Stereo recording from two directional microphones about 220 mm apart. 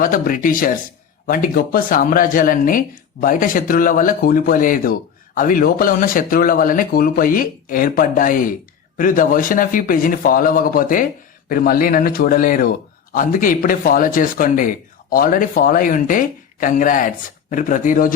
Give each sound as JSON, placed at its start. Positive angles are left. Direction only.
{"t": 0.0, "sound": "speech", "side_deg": 40}